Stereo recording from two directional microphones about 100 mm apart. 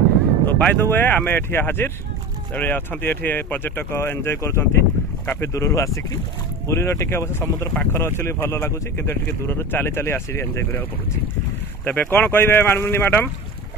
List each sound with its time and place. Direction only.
0.5 s speech: 15° left (ahead or behind)
7.7 s speech: 15° left (ahead or behind)
8.0 s speech: 25° left (ahead or behind)